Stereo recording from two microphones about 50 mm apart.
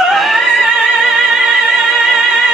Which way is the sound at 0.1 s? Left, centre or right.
Centre.